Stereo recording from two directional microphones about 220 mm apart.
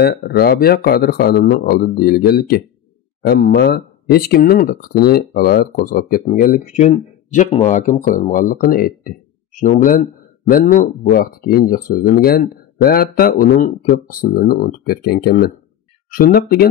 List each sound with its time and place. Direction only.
0.0 s speech: 45° left (ahead or behind)